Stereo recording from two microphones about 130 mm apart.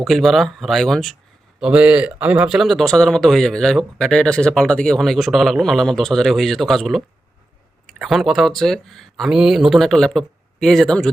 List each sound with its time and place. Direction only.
0.0 s speech: centre (ahead or behind)